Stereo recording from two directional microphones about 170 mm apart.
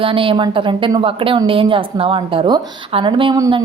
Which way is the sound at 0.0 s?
30° right (ahead or behind).